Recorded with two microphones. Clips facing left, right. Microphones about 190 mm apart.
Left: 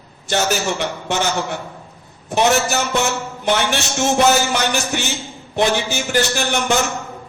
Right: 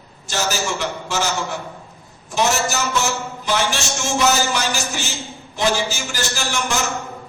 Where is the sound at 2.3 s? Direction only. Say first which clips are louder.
Left 4 dB; 60° left (ahead or behind).